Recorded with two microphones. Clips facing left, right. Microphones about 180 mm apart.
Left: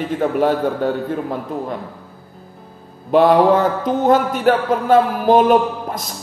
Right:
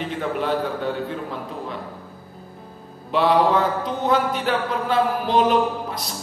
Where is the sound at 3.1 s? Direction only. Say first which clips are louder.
Left 6 dB; 45° left (ahead or behind).